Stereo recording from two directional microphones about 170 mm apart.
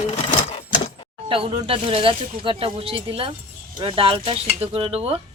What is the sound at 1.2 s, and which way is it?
Speech, 30° right (ahead or behind).